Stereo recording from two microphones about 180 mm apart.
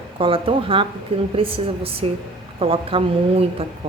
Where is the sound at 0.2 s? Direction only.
30° right (ahead or behind).